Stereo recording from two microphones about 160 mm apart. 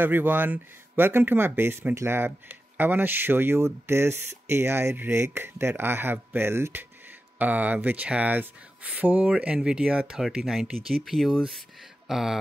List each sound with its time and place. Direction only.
0.0 s speech: 10° right (ahead or behind)